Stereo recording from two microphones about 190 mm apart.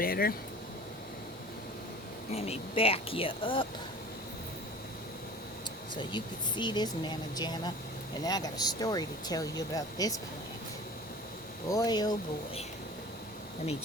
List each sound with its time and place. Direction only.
0.0 s speech: 50° left (ahead or behind)
2.3 s speech: 35° left (ahead or behind)
6.0 s speech: 25° left (ahead or behind)
11.7 s speech: 20° left (ahead or behind)